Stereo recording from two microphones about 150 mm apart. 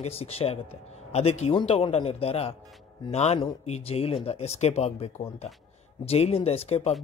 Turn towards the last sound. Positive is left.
turn(degrees=40)  # may be behind; listen again after turning